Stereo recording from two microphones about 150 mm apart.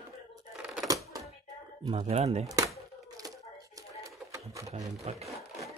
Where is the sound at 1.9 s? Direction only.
45° right (ahead or behind).